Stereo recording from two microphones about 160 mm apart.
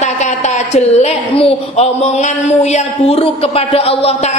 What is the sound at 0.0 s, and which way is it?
A woman's voice, 45° left (ahead or behind).